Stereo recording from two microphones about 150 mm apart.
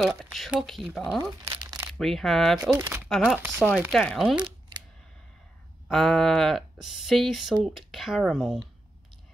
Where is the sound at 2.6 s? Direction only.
20° right (ahead or behind).